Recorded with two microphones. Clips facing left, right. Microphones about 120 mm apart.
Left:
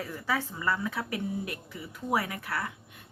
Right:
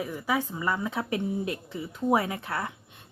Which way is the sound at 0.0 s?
15° right (ahead or behind).